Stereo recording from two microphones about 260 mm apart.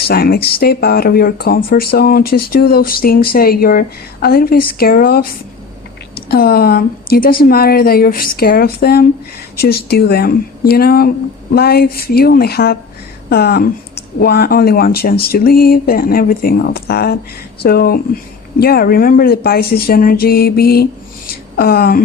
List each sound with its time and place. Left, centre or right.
0.1 s speech: left
6.2 s speech: left
21.2 s a sound: left